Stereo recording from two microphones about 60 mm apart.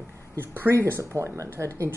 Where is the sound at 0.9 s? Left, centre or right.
Right.